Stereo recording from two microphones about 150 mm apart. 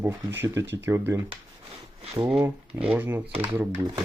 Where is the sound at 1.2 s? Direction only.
40° right (ahead or behind).